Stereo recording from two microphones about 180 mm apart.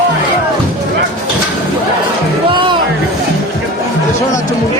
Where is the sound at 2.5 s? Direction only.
25° right (ahead or behind).